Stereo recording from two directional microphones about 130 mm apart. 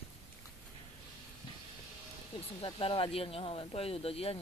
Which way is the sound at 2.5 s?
40° left (ahead or behind).